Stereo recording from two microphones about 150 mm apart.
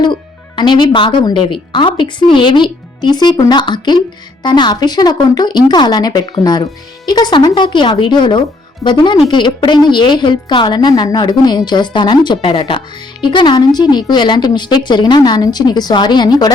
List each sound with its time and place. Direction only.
0.0 s a woman's voice: 30° left (ahead or behind)